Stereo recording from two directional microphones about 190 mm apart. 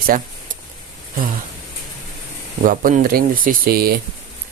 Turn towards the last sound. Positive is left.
turn(degrees=-50)  # may be behind; listen again after turning